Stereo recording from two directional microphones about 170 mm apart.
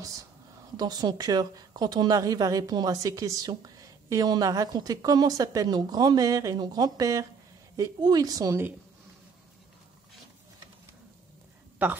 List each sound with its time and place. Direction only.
0.7 s a woman's voice: 25° right (ahead or behind)